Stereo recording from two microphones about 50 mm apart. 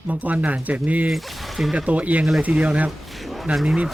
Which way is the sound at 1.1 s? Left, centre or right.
Centre.